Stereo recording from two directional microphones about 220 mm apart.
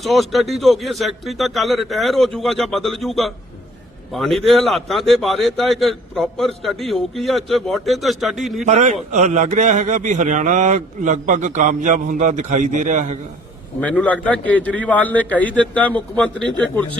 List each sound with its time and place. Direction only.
0.0 s a man's voice: centre (ahead or behind)
8.6 s a man's voice: 30° right (ahead or behind)
13.8 s a man's voice: 5° left (ahead or behind)